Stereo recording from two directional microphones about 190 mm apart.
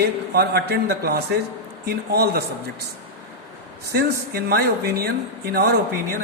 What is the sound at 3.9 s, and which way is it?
A man's voice, 55° right (ahead or behind).